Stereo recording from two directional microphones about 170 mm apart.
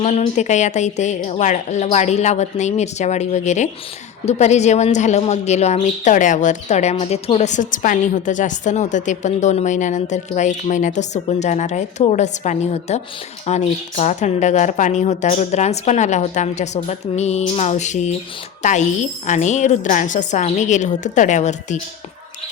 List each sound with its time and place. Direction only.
0.0 s speech: 40° left (ahead or behind)